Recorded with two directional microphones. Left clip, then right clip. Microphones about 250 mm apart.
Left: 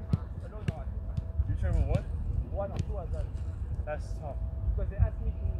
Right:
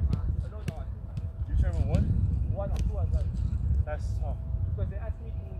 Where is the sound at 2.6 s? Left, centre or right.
Right.